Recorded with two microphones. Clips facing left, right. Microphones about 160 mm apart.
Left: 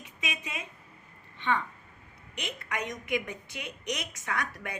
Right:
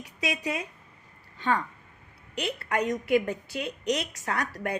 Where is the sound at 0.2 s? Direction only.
35° right (ahead or behind).